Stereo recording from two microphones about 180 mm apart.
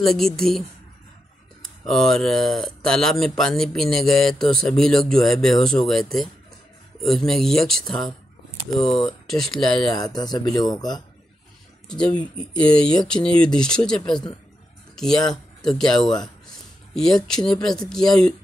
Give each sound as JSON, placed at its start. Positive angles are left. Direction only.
{"t": 0.0, "sound": "speech", "side_deg": 0}
{"t": 1.9, "sound": "speech", "side_deg": 0}
{"t": 9.3, "sound": "speech", "side_deg": 0}
{"t": 9.8, "sound": "speech", "side_deg": 20}
{"t": 11.9, "sound": "speech", "side_deg": 5}